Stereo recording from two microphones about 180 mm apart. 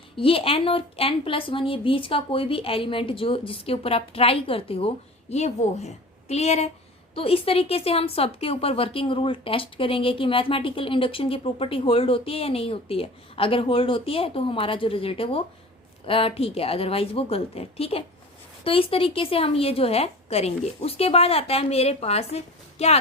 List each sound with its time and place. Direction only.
0.2 s speech: 30° left (ahead or behind)